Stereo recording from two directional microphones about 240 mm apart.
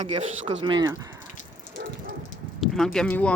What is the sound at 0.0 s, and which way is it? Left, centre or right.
Speech, right.